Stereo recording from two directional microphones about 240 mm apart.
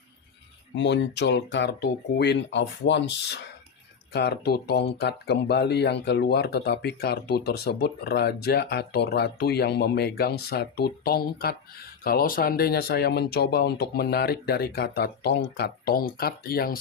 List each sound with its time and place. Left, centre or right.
0.8 s speech: left